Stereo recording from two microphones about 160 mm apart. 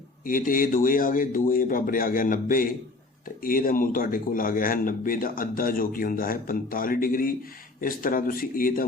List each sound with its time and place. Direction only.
0.3 s speech: 60° left (ahead or behind)